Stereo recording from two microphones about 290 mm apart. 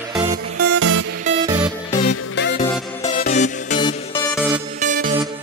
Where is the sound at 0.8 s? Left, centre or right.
Right.